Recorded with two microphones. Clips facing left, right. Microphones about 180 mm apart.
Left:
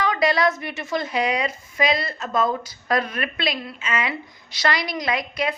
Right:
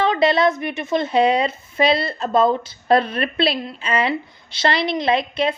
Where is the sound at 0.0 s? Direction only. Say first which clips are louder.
Right 4 dB; 25° right (ahead or behind).